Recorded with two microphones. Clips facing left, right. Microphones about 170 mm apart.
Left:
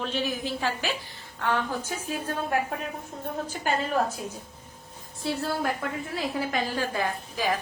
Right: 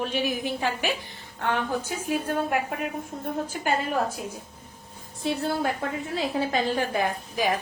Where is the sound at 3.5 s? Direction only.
10° right (ahead or behind).